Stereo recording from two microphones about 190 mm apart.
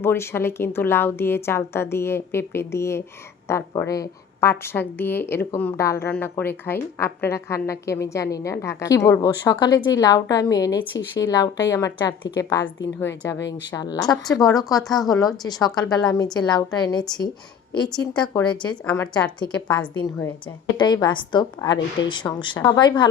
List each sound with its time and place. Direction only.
0.0 s a woman's voice: 10° left (ahead or behind)
13.7 s a woman's voice: 20° left (ahead or behind)
14.8 s a woman's voice: centre (ahead or behind)
15.4 s a woman's voice: 20° left (ahead or behind)
20.7 s a woman's voice: 20° left (ahead or behind)